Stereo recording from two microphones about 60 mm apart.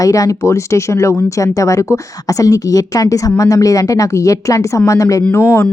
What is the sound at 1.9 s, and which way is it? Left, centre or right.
A woman's voice, left.